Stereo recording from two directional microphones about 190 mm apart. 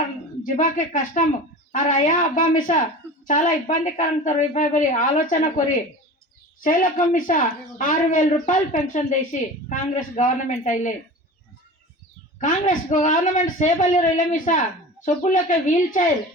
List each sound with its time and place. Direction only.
0.4 s a woman's voice: 45° left (ahead or behind)
12.4 s a woman's voice: 40° left (ahead or behind)